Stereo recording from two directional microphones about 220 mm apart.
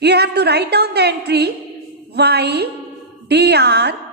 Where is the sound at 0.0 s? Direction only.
50° right (ahead or behind).